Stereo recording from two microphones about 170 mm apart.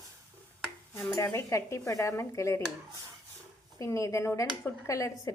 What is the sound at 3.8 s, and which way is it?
A woman's voice, 20° left (ahead or behind).